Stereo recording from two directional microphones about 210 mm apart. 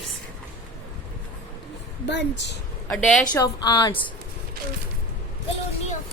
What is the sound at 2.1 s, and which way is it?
Speech, 55° left (ahead or behind).